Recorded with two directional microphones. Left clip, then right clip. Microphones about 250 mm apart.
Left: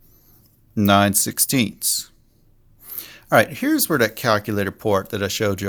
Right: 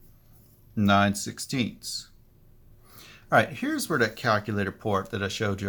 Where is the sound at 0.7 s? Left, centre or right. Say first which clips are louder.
Left 6 dB; left.